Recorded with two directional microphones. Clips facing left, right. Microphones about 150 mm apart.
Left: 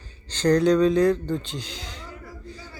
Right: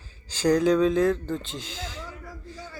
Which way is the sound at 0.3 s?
5° right (ahead or behind).